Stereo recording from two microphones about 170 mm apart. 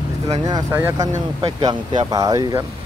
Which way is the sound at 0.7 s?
15° right (ahead or behind).